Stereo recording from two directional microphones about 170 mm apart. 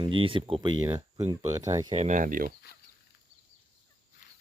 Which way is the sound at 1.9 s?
45° right (ahead or behind).